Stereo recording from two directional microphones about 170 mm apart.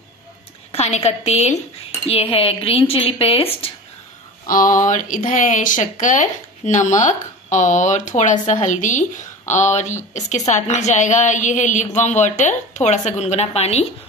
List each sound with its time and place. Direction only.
0.7 s speech: 40° left (ahead or behind)
4.5 s speech: 55° left (ahead or behind); by 13.8 s 40° left (ahead or behind)